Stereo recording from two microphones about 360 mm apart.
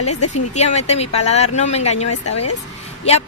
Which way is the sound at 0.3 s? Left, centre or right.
Centre.